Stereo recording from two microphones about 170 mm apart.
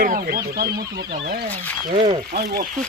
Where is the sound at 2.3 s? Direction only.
80° right.